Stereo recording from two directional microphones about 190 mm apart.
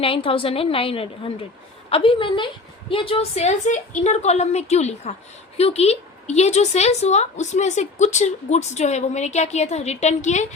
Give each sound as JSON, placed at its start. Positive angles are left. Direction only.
{"t": 0.0, "sound": "a woman's voice", "side_deg": 30}